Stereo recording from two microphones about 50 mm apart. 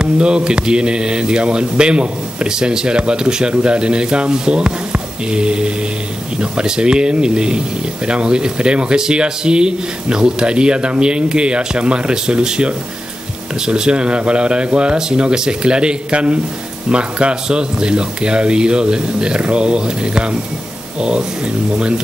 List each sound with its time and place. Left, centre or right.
0.0 s speech: centre